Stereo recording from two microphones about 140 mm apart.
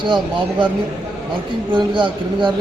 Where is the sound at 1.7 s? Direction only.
35° right (ahead or behind).